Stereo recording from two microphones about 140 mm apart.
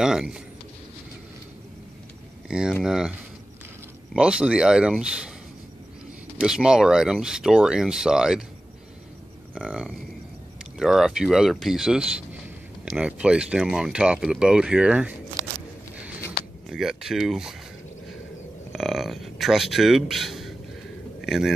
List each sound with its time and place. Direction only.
0.0 s speech: 5° right (ahead or behind)
2.4 s speech: 5° right (ahead or behind)
6.4 s speech: 5° right (ahead or behind)
9.6 s speech: 10° right (ahead or behind)
16.6 s speech: 5° right (ahead or behind)
18.7 s a man's voice: centre (ahead or behind)